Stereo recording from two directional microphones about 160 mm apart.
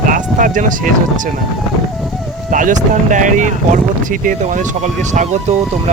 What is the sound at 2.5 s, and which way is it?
Speech, 55° right (ahead or behind).